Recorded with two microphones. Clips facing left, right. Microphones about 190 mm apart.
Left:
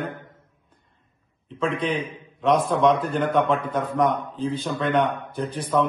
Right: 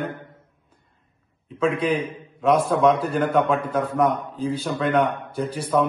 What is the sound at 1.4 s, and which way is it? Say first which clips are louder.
A man's voice: right 3 dB; 5° right (ahead or behind).